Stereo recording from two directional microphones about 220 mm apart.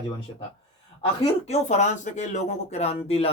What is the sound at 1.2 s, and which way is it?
Speech, 30° left (ahead or behind).